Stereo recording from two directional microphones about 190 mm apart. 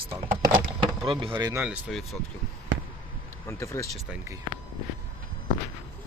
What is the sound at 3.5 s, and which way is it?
Speech, 15° left (ahead or behind).